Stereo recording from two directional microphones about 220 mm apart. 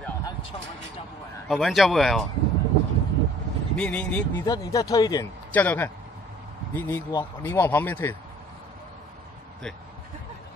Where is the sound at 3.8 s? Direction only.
5° left (ahead or behind).